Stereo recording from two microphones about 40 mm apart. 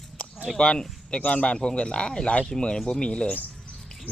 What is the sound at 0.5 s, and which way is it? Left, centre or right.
Speech, left.